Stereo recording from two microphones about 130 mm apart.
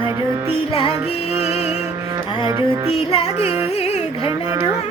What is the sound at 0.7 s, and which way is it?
Music, 50° left (ahead or behind).